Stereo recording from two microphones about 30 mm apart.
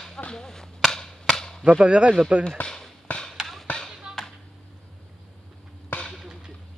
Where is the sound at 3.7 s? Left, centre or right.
Left.